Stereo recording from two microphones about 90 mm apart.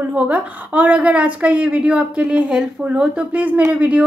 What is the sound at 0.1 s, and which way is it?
A woman's voice, 15° right (ahead or behind).